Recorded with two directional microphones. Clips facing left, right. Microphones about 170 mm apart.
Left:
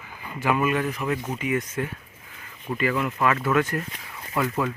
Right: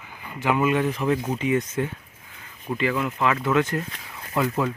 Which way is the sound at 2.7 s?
10° right (ahead or behind).